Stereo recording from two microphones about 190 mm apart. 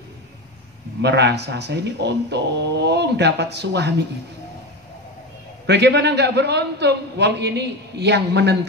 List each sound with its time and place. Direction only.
1.0 s a man's voice: 65° right (ahead or behind)
5.7 s a man's voice: 65° right (ahead or behind)